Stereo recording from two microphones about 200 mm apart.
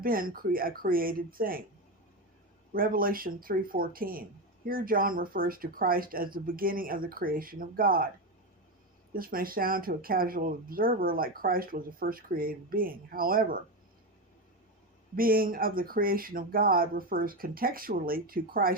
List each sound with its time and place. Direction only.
0.0 s speech: 45° right (ahead or behind)
2.7 s speech: 45° right (ahead or behind)
9.1 s speech: 45° right (ahead or behind)
15.1 s speech: 45° right (ahead or behind)